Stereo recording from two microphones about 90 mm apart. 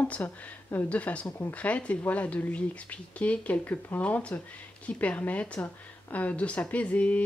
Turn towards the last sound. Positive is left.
turn(degrees=15)  # may be behind; listen again after turning